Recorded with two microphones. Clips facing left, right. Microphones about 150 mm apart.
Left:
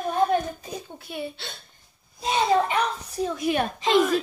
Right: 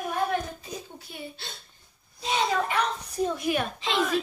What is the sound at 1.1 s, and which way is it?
Speech, 70° left (ahead or behind).